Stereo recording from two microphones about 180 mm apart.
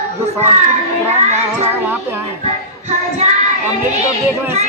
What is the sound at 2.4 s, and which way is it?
Music, 40° right (ahead or behind).